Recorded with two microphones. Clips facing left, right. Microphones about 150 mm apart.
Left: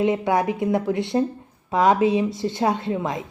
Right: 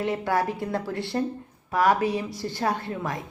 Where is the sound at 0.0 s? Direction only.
20° left (ahead or behind).